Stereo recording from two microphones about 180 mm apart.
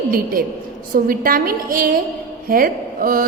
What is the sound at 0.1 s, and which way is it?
Mantra, 50° right (ahead or behind).